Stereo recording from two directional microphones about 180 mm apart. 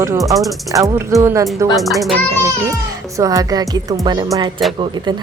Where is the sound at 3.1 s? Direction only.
20° right (ahead or behind).